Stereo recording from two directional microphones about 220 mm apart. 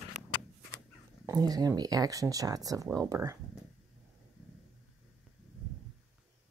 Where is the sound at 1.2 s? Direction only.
15° right (ahead or behind).